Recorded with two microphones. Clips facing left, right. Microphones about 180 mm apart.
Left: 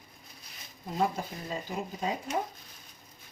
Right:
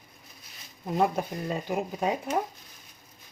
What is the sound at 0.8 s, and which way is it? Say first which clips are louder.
Speech: right 4 dB; 60° right (ahead or behind).